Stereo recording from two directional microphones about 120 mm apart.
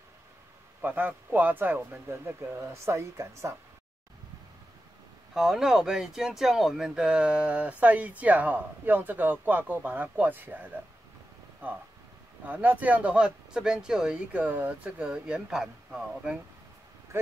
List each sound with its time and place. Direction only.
0.8 s speech: 15° right (ahead or behind)
5.3 s speech: 5° right (ahead or behind)